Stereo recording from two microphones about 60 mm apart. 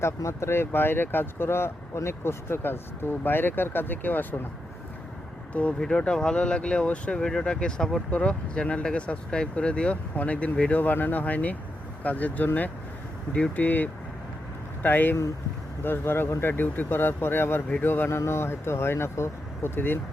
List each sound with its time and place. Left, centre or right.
0.2 s speech: left
5.8 s speech: centre; by 18.2 s left
18.2 s speech: left